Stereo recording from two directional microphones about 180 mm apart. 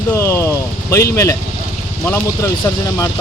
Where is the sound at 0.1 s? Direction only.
15° left (ahead or behind).